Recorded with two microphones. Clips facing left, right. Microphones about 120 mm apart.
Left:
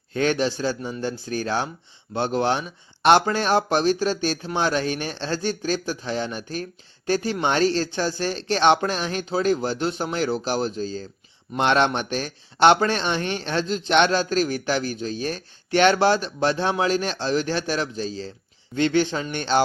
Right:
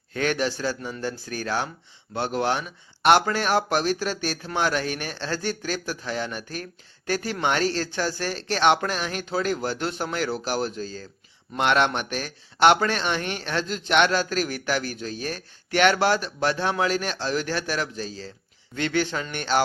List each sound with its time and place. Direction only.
0.1 s speech: 25° left (ahead or behind)